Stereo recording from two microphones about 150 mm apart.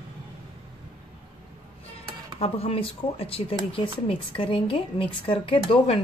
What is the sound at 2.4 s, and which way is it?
Speech, 40° left (ahead or behind).